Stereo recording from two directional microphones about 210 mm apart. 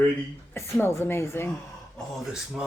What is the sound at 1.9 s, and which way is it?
Speech, 5° right (ahead or behind).